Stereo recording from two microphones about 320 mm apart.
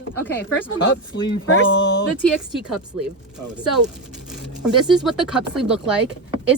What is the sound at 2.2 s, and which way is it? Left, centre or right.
Speech, centre.